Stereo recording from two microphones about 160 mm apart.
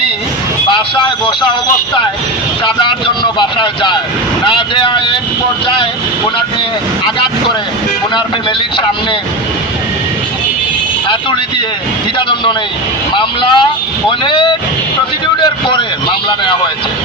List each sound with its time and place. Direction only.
0.7 s speech: 30° left (ahead or behind)
2.6 s speech: 30° left (ahead or behind)
13.1 s speech: 30° left (ahead or behind)